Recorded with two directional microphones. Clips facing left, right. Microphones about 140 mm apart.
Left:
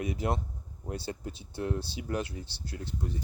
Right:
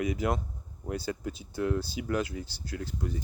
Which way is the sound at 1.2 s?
90° right.